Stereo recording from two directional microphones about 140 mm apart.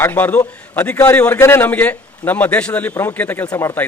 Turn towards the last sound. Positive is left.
turn(degrees=15)  # may be behind; listen again after turning